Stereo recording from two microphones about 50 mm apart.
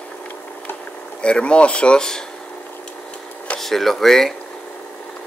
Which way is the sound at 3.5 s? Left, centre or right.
Centre.